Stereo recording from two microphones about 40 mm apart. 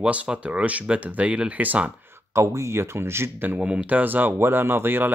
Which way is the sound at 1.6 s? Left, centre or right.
Right.